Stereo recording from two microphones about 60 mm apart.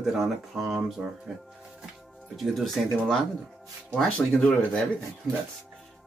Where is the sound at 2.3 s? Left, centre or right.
Centre.